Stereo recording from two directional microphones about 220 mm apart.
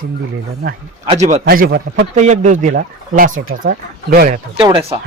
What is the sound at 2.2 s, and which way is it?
Speech, 35° right (ahead or behind).